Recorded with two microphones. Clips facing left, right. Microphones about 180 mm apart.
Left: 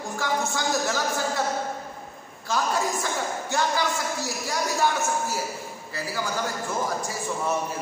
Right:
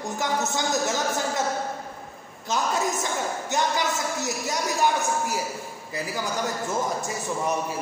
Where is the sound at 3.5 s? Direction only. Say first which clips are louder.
Even; 20° right (ahead or behind).